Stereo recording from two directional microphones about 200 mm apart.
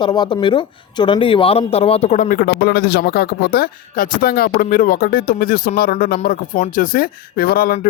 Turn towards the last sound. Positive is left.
turn(degrees=45)  # may be behind; listen again after turning